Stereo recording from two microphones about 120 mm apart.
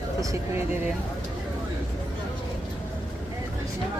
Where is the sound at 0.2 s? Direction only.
25° right (ahead or behind).